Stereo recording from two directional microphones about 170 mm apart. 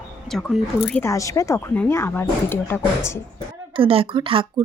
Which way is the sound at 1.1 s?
20° left (ahead or behind).